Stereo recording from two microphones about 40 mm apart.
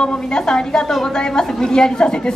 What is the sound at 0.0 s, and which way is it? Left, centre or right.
Speech, left.